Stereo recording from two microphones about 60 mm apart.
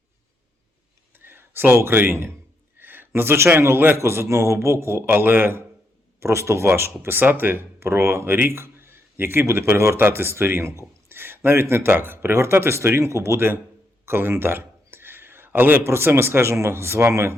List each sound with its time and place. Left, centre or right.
1.2 s a sound: right
2.7 s speech: right
6.1 s speech: right
14.0 s speech: right